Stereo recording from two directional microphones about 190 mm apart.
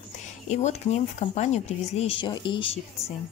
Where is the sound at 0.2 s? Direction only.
35° left (ahead or behind).